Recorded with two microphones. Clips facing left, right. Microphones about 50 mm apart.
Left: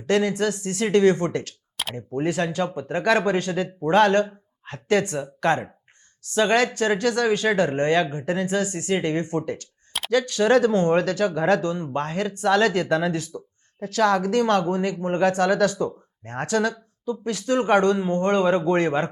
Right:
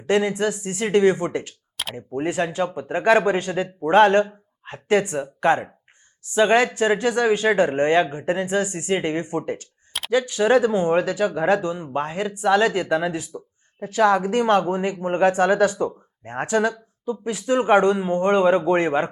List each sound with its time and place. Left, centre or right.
0.0 s speech: centre
1.7 s clicking: centre
2.0 s speech: centre